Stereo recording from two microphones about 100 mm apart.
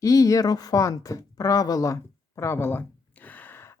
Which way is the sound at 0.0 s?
35° left (ahead or behind).